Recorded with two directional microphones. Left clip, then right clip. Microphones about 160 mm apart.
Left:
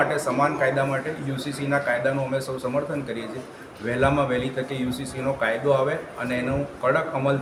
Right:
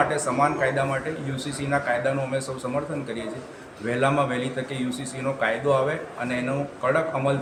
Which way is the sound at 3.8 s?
5° left (ahead or behind).